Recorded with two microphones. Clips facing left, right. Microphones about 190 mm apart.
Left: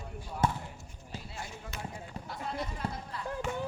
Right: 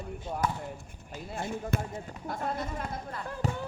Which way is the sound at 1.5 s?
55° right (ahead or behind).